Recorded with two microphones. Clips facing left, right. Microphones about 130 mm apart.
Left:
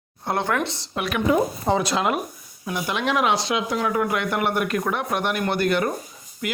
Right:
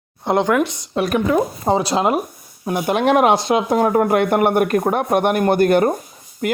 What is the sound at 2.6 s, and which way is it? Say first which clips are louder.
Speech: right 8 dB; 50° right (ahead or behind).